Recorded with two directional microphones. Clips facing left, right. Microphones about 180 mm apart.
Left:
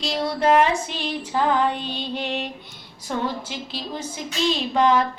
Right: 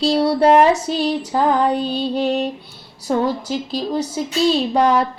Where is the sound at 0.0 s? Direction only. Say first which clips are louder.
Right 8 dB; 35° right (ahead or behind).